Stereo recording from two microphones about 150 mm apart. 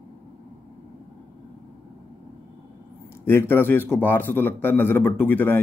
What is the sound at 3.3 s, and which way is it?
A man's voice, 15° left (ahead or behind).